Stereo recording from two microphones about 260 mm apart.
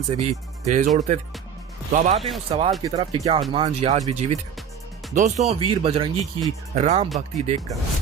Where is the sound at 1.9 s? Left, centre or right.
Right.